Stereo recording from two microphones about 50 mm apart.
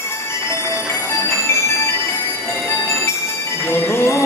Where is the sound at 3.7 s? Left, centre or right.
Left.